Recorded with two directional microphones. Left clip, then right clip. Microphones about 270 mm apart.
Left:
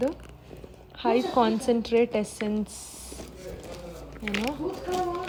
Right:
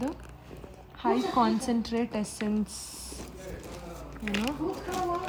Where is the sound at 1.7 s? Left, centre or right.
Right.